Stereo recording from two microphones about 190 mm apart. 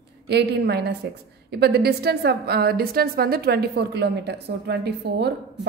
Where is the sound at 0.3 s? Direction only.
60° right (ahead or behind).